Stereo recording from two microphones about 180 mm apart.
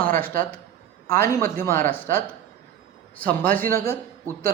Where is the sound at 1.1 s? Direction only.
15° left (ahead or behind).